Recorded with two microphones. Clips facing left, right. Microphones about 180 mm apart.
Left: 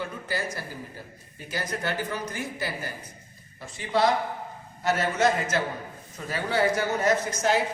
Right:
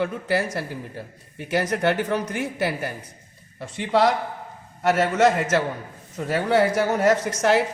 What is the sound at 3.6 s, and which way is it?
Speech, 80° right.